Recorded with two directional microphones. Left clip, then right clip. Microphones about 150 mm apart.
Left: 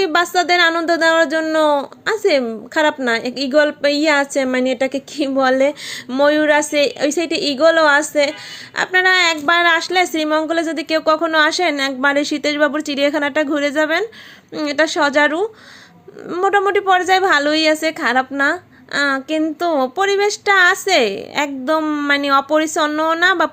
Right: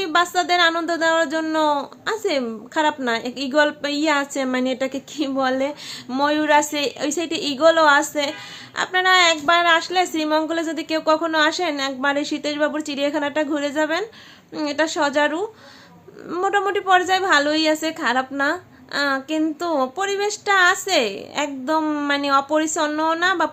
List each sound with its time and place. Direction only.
0.0 s a woman's voice: 30° left (ahead or behind)
6.1 s a woman's voice: 20° left (ahead or behind)